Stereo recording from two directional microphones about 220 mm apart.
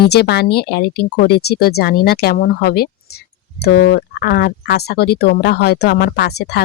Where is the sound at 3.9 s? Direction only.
45° left (ahead or behind).